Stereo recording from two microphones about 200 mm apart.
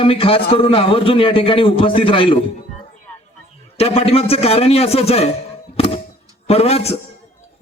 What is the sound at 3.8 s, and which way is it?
A man's voice, 30° left (ahead or behind).